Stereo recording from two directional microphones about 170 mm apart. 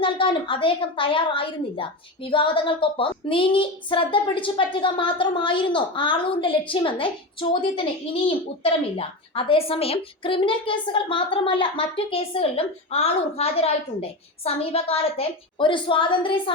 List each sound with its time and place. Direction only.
0.0 s a woman's voice: 30° left (ahead or behind)
8.6 s a woman's voice: 35° left (ahead or behind)